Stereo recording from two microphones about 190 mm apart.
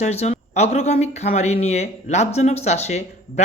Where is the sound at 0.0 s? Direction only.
35° left (ahead or behind).